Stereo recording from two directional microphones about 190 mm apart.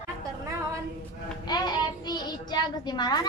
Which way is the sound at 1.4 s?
20° left (ahead or behind).